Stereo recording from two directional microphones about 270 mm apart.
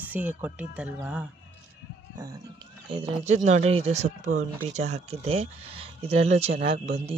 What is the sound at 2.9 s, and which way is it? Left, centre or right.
Speech, right.